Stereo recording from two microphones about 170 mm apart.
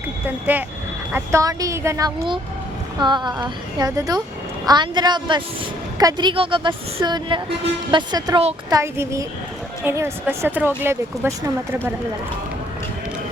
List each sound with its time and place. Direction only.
0.3 s a woman's voice: 10° right (ahead or behind)